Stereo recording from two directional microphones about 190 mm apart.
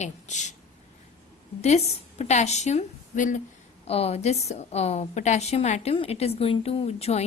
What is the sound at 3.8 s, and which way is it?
A woman's voice, 30° left (ahead or behind).